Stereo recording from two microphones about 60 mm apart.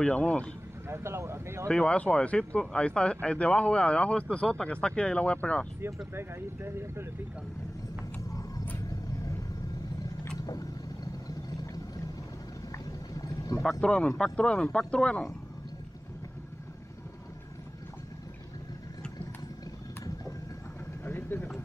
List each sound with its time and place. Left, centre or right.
0.0 s speech: centre
0.8 s speech: right
1.7 s speech: centre
6.1 s speech: right
8.3 s vehicle: left
8.7 s vehicle: left
11.2 s vehicle: left
12.7 s a sound: left
13.7 s speech: centre
21.0 s a sound: left